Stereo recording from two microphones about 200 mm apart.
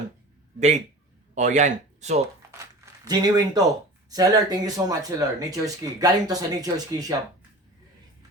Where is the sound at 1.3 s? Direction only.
35° right (ahead or behind).